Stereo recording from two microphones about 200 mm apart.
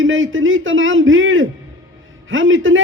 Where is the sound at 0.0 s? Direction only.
75° right (ahead or behind).